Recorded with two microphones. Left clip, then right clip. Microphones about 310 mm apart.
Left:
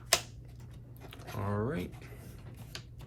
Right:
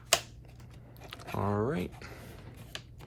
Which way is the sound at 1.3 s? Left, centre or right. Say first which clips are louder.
Right 4 dB; centre.